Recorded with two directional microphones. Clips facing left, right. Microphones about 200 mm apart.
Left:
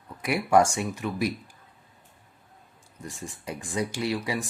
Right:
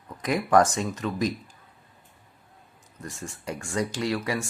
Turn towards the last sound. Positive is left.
turn(degrees=15)  # may be behind; listen again after turning